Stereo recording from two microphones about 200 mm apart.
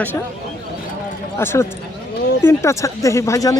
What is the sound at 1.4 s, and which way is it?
Speech, 10° left (ahead or behind).